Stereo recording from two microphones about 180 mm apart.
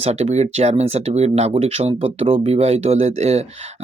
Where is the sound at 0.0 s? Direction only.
35° right (ahead or behind).